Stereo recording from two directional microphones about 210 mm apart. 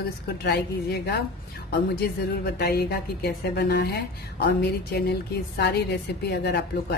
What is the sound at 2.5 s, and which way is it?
Speech, 45° left (ahead or behind).